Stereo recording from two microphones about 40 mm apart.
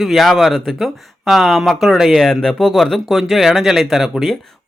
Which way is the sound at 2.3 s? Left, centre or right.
Centre.